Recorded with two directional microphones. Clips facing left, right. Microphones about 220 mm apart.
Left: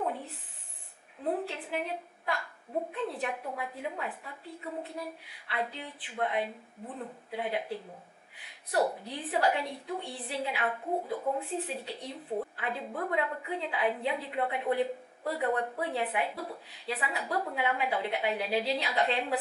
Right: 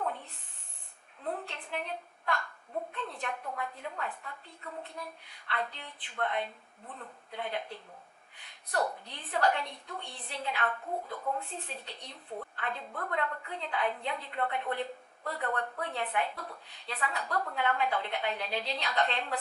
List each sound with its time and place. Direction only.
0.0 s a woman's voice: 5° left (ahead or behind)
10.8 s speech: 30° left (ahead or behind)
11.4 s a woman's voice: 5° left (ahead or behind)